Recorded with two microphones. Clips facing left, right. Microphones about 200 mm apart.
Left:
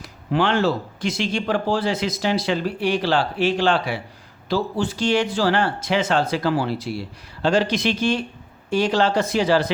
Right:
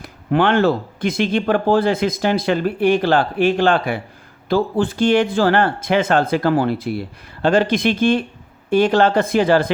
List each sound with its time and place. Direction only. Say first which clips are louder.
0.0 s speech: right 4 dB; 55° right (ahead or behind)